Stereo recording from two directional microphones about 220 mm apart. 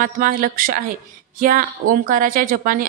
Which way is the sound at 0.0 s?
40° right (ahead or behind).